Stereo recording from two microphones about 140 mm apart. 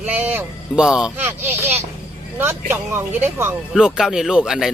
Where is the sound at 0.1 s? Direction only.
15° right (ahead or behind).